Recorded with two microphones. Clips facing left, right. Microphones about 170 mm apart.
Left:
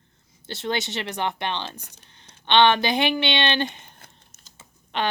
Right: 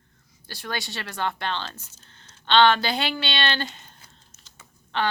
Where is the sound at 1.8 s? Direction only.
65° left (ahead or behind).